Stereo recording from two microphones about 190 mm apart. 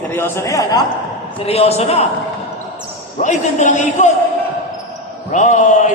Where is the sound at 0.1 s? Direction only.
10° left (ahead or behind).